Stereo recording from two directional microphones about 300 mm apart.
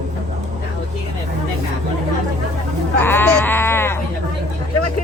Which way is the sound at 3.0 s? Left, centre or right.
Centre.